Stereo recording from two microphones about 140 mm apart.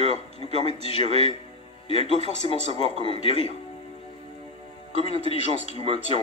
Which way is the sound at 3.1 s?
40° left (ahead or behind).